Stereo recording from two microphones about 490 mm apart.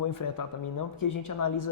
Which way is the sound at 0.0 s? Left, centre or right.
Left.